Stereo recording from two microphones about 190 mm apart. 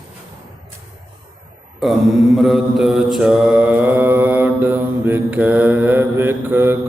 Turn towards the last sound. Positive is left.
turn(degrees=-10)  # may be behind; listen again after turning